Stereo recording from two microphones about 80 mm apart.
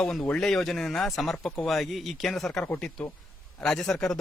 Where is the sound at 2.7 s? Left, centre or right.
Centre.